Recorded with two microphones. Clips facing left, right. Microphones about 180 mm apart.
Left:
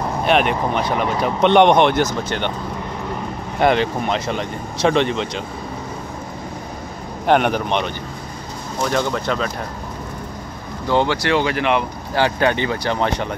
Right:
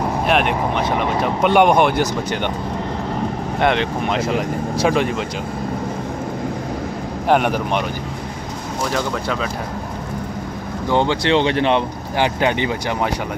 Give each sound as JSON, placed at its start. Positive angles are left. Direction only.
{"t": 0.3, "sound": "speech", "side_deg": 0}
{"t": 3.5, "sound": "speech", "side_deg": 0}
{"t": 7.2, "sound": "speech", "side_deg": -5}
{"t": 8.9, "sound": "speech", "side_deg": 0}
{"t": 10.9, "sound": "speech", "side_deg": -20}
{"t": 12.2, "sound": "speech", "side_deg": -15}